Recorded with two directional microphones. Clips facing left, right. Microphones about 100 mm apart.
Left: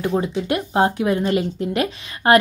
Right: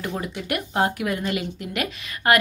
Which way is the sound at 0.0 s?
25° left (ahead or behind).